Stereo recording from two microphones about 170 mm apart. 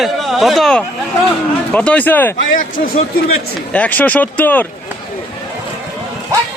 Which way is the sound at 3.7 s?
10° left (ahead or behind).